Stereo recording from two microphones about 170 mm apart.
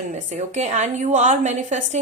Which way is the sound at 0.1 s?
45° right (ahead or behind).